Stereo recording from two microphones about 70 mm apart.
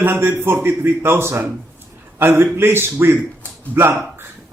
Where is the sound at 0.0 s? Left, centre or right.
Right.